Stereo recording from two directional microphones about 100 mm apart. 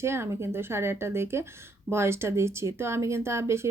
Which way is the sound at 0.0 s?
25° right (ahead or behind).